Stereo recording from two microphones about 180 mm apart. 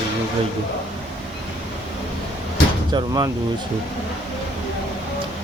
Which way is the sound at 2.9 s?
20° right (ahead or behind).